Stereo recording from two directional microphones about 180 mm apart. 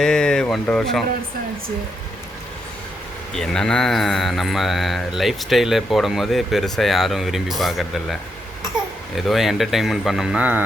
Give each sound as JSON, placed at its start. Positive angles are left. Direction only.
{"t": 0.0, "sound": "speech", "side_deg": 5}
{"t": 3.3, "sound": "speech", "side_deg": 5}